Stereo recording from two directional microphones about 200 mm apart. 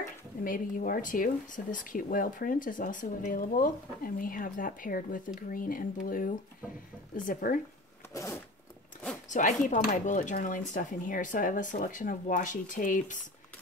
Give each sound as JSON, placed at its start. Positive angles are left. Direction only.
{"t": 0.0, "sound": "speech", "side_deg": 45}
{"t": 8.1, "sound": "zipper", "side_deg": 15}
{"t": 9.3, "sound": "speech", "side_deg": 40}